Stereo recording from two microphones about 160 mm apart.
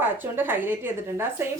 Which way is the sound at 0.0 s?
10° right (ahead or behind).